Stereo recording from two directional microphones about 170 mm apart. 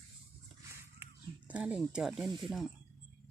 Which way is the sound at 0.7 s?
10° right (ahead or behind).